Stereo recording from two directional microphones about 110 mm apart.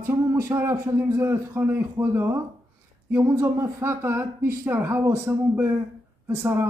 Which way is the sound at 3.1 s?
15° right (ahead or behind).